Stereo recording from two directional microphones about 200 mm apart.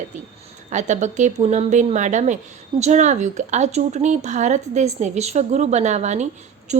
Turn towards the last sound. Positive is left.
turn(degrees=-35)  # may be behind; listen again after turning